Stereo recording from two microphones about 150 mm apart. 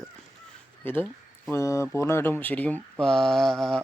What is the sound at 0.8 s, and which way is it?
Speech, 15° left (ahead or behind).